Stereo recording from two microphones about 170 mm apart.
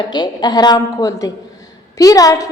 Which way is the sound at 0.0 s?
25° left (ahead or behind).